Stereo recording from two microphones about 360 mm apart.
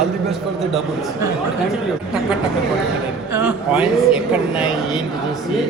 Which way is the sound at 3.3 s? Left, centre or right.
Centre.